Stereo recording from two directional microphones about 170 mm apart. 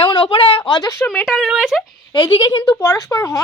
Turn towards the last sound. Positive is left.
turn(degrees=20)  # may be behind; listen again after turning